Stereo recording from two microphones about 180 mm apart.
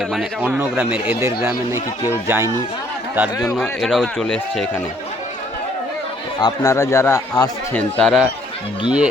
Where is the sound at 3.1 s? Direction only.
10° right (ahead or behind).